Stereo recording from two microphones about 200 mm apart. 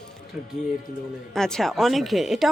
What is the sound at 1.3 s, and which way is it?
Speech, centre (ahead or behind).